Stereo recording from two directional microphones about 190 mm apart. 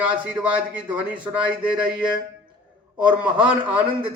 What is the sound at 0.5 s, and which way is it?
Speech, 10° right (ahead or behind).